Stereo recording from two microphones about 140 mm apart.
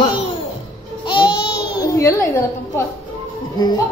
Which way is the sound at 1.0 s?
35° left (ahead or behind).